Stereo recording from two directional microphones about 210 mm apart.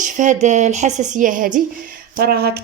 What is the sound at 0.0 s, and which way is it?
Speech, 35° right (ahead or behind).